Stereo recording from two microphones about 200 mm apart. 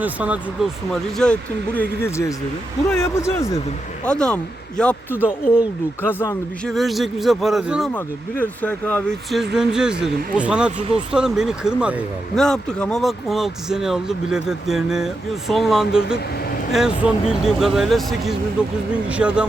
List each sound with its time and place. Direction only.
0.0 s speech: 5° right (ahead or behind)
1.1 s speech: 5° left (ahead or behind)
6.0 s speech: 10° left (ahead or behind); by 19.5 s 5° right (ahead or behind)